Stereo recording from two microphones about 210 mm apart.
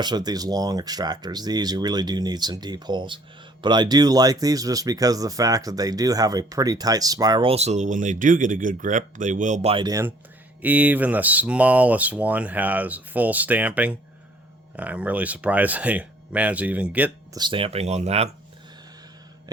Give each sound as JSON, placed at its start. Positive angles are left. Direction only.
{"t": 0.0, "sound": "speech", "side_deg": -20}
{"t": 17.3, "sound": "speech", "side_deg": -20}